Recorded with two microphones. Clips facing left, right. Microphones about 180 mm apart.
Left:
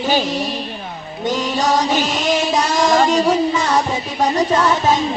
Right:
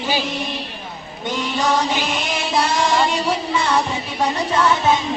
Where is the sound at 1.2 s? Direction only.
40° left (ahead or behind).